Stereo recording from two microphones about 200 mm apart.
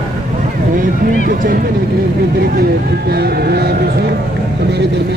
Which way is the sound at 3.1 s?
50° right (ahead or behind).